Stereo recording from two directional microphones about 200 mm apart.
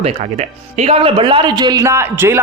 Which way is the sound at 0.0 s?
30° right (ahead or behind).